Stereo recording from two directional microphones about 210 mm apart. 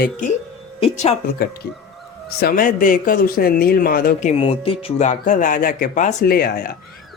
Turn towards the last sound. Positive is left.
turn(degrees=45)  # may be behind; listen again after turning